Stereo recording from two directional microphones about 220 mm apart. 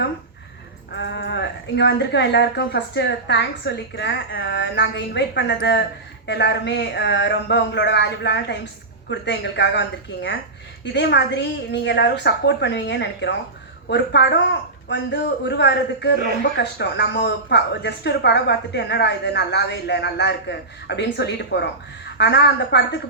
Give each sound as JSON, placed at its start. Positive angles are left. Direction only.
{"t": 0.9, "sound": "a woman's voice", "side_deg": 55}
{"t": 10.9, "sound": "a woman's voice", "side_deg": 50}